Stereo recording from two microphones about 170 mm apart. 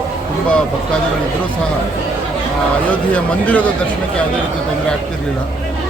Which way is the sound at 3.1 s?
5° left (ahead or behind).